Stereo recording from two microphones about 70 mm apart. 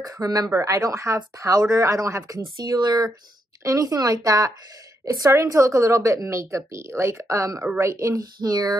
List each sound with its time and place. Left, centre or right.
0.0 s speech: right
0.5 s speech: right
2.5 s speech: right
3.6 s speech: right